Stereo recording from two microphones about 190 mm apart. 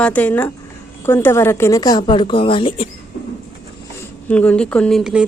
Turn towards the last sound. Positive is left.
turn(degrees=0)  # may be behind; listen again after turning